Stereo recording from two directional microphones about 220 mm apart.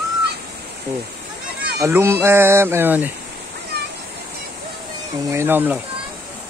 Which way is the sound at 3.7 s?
50° right (ahead or behind).